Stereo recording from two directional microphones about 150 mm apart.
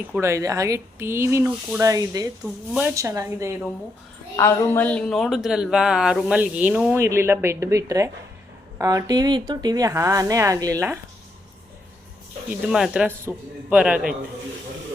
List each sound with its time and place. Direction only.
0.1 s speech: 20° right (ahead or behind)
4.4 s speech: 15° left (ahead or behind); by 11.0 s 20° right (ahead or behind)
12.5 s speech: 5° right (ahead or behind)